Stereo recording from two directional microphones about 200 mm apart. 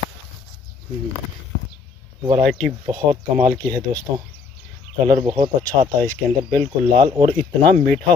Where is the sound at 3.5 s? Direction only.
15° right (ahead or behind).